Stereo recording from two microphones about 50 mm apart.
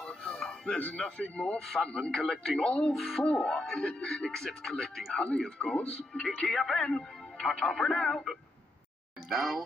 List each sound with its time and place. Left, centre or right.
0.0 s music: centre
0.7 s speech: left
1.6 s speech: centre
9.3 s speech: centre